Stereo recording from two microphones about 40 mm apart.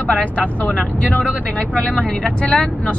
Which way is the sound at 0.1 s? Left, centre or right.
Left.